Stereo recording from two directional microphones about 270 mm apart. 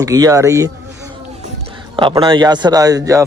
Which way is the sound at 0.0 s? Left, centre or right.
Centre.